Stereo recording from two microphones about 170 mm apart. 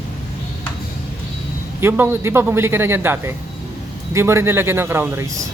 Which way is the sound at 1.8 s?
15° right (ahead or behind).